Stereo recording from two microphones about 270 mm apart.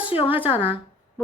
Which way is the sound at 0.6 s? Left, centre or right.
Centre.